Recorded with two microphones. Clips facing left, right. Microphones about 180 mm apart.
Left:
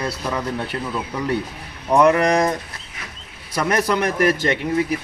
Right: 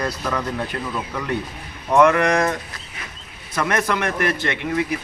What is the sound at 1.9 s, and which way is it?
Speech, 35° left (ahead or behind).